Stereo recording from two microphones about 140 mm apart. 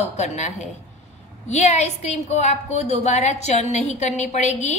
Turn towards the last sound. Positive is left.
turn(degrees=55)  # may be behind; listen again after turning